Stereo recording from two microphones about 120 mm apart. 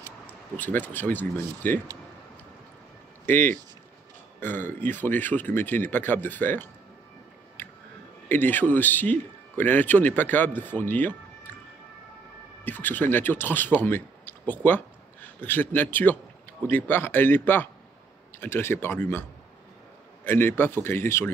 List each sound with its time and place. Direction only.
0.6 s a man's voice: 15° left (ahead or behind)
3.3 s a man's voice: 15° left (ahead or behind)
7.6 s music: 15° left (ahead or behind)
8.3 s a man's voice: 15° left (ahead or behind)
12.6 s a man's voice: 15° left (ahead or behind)
20.2 s speech: 20° left (ahead or behind)